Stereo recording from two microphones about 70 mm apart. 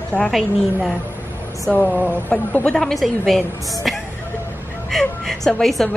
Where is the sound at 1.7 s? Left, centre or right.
Left.